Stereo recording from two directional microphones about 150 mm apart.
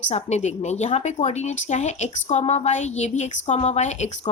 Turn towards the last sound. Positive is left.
turn(degrees=50)  # may be behind; listen again after turning